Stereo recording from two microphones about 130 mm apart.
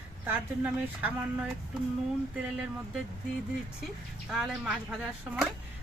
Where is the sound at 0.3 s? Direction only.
15° right (ahead or behind).